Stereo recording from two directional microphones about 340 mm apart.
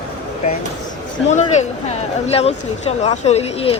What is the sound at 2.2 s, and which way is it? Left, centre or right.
Speech, centre.